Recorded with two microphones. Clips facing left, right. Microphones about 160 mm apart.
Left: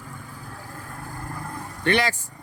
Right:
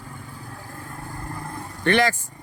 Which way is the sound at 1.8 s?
45° right (ahead or behind).